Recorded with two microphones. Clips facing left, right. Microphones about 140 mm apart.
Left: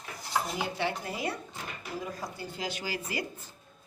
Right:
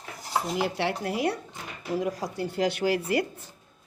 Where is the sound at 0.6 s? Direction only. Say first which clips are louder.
Right 5 dB; 75° right (ahead or behind).